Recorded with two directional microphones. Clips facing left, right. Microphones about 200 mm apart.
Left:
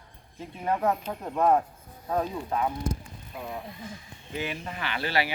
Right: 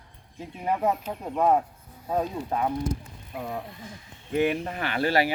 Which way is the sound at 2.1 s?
30° right (ahead or behind).